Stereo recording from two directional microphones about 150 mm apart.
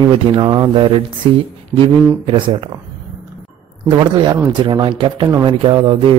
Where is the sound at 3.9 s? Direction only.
30° right (ahead or behind).